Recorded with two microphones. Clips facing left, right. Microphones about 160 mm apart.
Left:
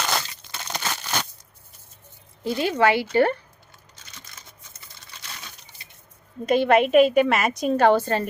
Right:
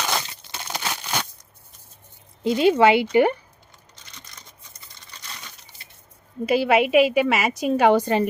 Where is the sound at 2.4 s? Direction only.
20° right (ahead or behind).